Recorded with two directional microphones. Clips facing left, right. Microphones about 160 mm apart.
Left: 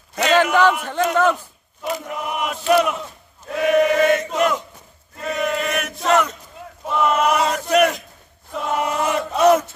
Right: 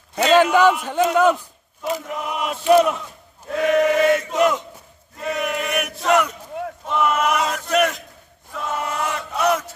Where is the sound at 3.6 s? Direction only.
20° left (ahead or behind).